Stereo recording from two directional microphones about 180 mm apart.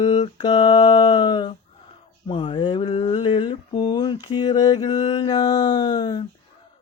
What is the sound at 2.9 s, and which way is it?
Mantra, 35° left (ahead or behind).